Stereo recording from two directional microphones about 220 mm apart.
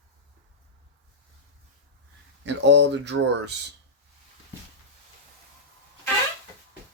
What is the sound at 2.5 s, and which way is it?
Speech, 55° right (ahead or behind).